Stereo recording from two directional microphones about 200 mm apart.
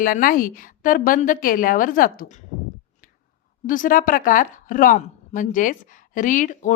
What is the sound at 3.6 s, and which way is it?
A woman's voice, 40° left (ahead or behind).